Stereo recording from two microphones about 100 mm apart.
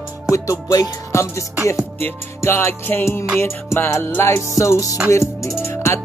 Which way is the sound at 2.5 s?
25° left (ahead or behind).